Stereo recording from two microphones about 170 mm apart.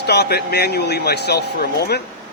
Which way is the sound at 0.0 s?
75° left (ahead or behind).